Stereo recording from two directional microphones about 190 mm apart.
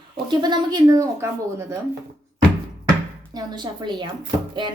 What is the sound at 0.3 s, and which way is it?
A woman's voice, 20° right (ahead or behind).